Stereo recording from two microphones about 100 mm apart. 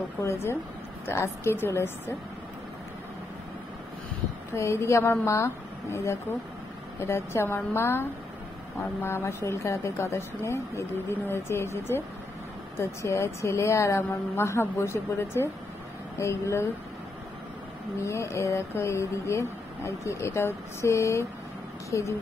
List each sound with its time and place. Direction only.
0.2 s speech: 25° left (ahead or behind)
4.6 s speech: 30° left (ahead or behind)
18.0 s speech: 30° left (ahead or behind)